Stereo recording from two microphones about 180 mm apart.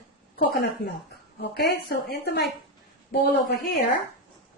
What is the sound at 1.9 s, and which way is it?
A woman's voice, 65° left (ahead or behind).